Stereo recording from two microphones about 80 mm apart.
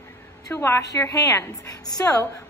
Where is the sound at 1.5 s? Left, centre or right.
Left.